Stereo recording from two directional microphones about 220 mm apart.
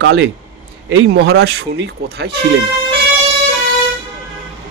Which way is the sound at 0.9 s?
50° right (ahead or behind).